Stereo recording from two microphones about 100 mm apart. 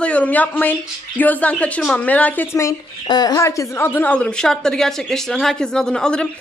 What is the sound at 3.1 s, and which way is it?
A woman's voice, 40° left (ahead or behind).